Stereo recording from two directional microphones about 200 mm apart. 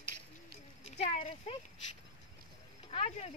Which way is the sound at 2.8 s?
30° left (ahead or behind).